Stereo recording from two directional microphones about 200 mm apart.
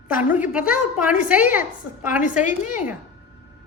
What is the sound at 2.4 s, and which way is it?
Speech, 40° left (ahead or behind).